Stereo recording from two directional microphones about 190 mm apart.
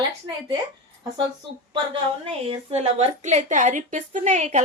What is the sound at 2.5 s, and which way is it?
A woman's voice, 35° right (ahead or behind).